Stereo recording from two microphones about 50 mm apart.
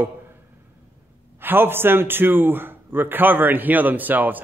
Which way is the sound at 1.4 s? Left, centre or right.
Right.